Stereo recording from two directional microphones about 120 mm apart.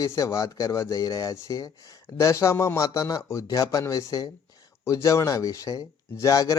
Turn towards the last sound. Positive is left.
turn(degrees=30)  # may be behind; listen again after turning